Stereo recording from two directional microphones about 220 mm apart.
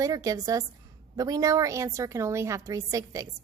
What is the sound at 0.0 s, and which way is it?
A woman's voice, 15° right (ahead or behind).